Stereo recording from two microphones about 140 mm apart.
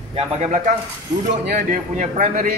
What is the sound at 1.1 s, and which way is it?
Speech, 30° right (ahead or behind).